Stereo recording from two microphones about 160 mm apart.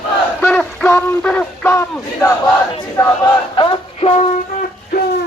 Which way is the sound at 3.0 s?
20° left (ahead or behind).